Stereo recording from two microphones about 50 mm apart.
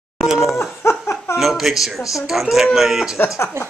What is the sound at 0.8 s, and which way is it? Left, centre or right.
Laughter, left.